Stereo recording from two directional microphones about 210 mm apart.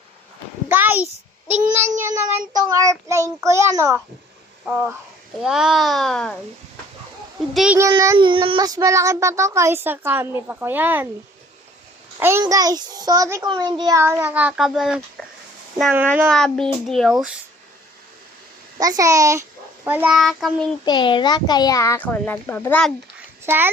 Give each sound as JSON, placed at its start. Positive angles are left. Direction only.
{"t": 0.7, "sound": "a sound", "side_deg": -10}
{"t": 1.7, "sound": "child singing", "side_deg": -10}
{"t": 5.4, "sound": "a child's voice", "side_deg": 0}
{"t": 7.5, "sound": "a child's voice", "side_deg": -5}
{"t": 7.8, "sound": "child singing", "side_deg": -15}
{"t": 12.2, "sound": "child singing", "side_deg": -10}
{"t": 16.3, "sound": "a child's voice", "side_deg": 0}
{"t": 18.8, "sound": "a child's voice", "side_deg": -15}
{"t": 20.8, "sound": "a child's voice", "side_deg": 20}
{"t": 23.5, "sound": "child singing", "side_deg": -10}